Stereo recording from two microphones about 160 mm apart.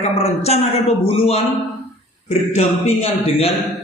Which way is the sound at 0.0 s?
40° left (ahead or behind).